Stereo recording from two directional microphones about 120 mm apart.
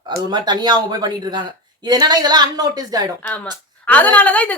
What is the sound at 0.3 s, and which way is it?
A woman's voice, 35° right (ahead or behind).